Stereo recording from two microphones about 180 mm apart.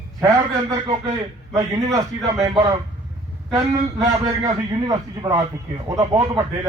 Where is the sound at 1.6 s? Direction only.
15° right (ahead or behind).